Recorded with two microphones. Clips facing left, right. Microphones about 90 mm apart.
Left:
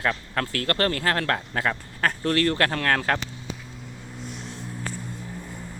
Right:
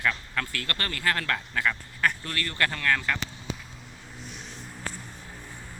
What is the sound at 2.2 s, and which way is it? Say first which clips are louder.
Speech: left 8 dB; 55° left (ahead or behind).